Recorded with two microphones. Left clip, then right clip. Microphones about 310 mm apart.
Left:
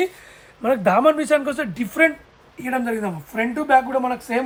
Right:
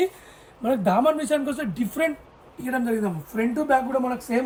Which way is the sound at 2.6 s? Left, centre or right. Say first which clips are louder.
Left 2 dB; centre.